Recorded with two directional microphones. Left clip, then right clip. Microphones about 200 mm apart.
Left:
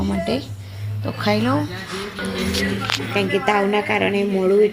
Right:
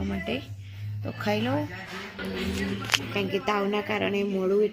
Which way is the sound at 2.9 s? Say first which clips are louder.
Left 1 dB; 45° right (ahead or behind).